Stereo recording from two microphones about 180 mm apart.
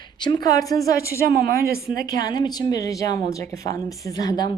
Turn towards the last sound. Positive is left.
turn(degrees=20)  # may be behind; listen again after turning